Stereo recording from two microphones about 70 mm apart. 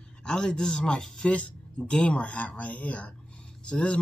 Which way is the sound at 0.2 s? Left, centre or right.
Centre.